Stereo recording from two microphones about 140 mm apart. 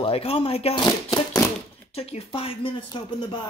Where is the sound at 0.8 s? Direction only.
25° left (ahead or behind).